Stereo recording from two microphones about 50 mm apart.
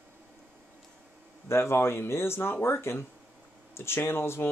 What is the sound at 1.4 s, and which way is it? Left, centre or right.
Speech, left.